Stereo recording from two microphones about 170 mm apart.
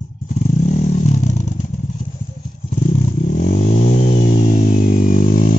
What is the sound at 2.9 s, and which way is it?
Vehicle, 50° left (ahead or behind).